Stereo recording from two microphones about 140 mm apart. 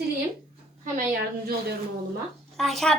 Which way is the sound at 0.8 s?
80° right.